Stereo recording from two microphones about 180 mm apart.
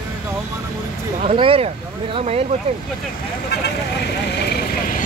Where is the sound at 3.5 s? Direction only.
65° left (ahead or behind).